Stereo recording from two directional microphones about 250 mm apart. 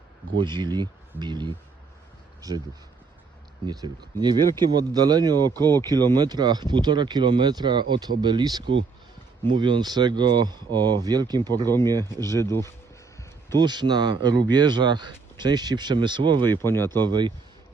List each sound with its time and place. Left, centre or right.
0.3 s speech: centre
3.7 s speech: centre
12.3 s speech: centre
13.6 s speech: centre
16.5 s speech: centre
17.0 s speech: centre